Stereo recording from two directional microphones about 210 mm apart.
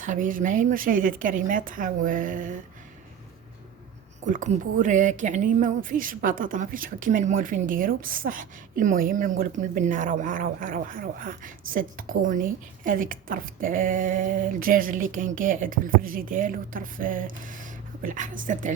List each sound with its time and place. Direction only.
0.0 s speech: 40° right (ahead or behind)
4.3 s speech: 40° right (ahead or behind)